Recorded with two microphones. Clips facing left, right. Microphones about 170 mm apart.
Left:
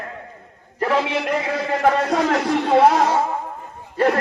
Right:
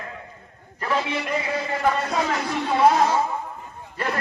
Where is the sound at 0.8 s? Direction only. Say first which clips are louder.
Left 5 dB; 75° left (ahead or behind).